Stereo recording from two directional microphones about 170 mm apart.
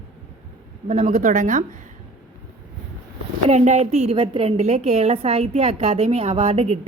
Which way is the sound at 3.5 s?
40° right (ahead or behind).